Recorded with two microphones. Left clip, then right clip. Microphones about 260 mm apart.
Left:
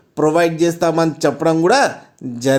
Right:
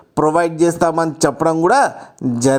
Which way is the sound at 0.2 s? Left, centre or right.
Right.